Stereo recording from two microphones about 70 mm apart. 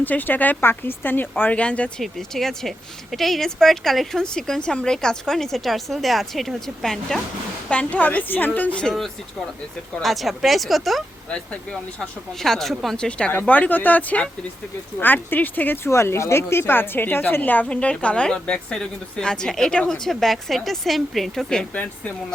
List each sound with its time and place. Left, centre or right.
0.0 s a woman's voice: left
2.0 s speech: centre
7.7 s a woman's voice: centre
8.8 s speech: centre
11.3 s speech: centre
13.1 s a woman's voice: centre
15.9 s a woman's voice: left; by 21.7 s centre
21.7 s a woman's voice: left